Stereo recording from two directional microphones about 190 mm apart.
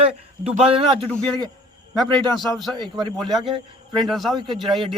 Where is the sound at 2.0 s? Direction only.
25° right (ahead or behind).